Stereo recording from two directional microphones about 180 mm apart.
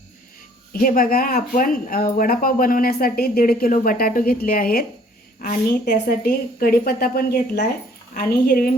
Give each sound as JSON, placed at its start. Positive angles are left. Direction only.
{"t": 0.7, "sound": "a woman's voice", "side_deg": 50}